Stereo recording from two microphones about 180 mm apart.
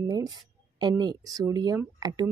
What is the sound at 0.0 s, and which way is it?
Speech, 20° right (ahead or behind).